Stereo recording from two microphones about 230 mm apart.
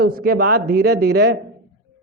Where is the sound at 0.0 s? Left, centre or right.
Right.